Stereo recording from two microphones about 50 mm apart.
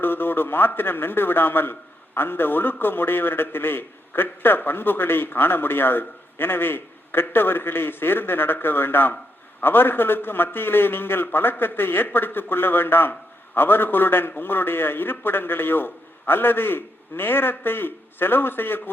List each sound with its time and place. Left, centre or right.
0.0 s a man's voice: left